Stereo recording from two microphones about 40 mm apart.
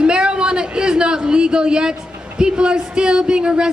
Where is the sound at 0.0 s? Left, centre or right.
Right.